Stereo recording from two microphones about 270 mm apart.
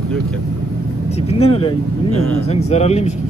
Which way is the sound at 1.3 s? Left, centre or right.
Left.